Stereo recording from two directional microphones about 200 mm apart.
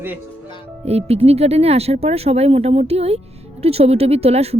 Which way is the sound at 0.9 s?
30° right (ahead or behind).